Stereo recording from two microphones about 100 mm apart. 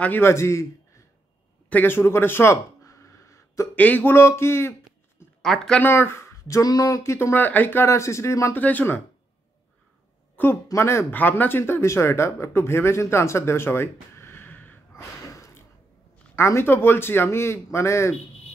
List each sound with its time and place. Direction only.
0.0 s speech: 20° left (ahead or behind)
1.7 s a sound: 20° left (ahead or behind)
3.7 s speech: 15° left (ahead or behind)
5.4 s speech: 5° left (ahead or behind)
5.8 s speech: 20° left (ahead or behind)
8.5 s speech: 15° left (ahead or behind)
10.3 s speech: 20° left (ahead or behind)
15.3 s a sound: 30° left (ahead or behind)
16.3 s speech: 25° left (ahead or behind)